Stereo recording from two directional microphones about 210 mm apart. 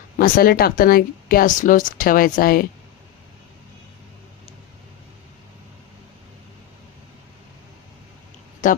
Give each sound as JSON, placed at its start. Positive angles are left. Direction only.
{"t": 0.2, "sound": "speech", "side_deg": 45}
{"t": 8.6, "sound": "speech", "side_deg": 40}